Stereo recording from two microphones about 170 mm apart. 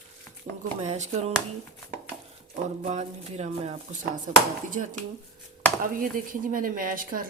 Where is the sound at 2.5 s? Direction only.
45° right (ahead or behind).